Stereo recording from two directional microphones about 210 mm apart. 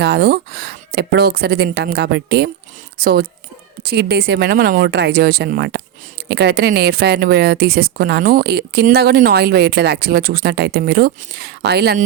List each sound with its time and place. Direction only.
0.0 s a woman's voice: 50° right (ahead or behind)